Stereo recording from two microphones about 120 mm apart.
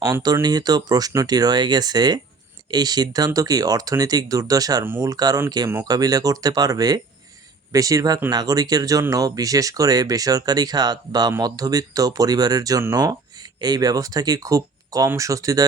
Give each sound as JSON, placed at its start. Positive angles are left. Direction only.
{"t": 0.0, "sound": "speech", "side_deg": -30}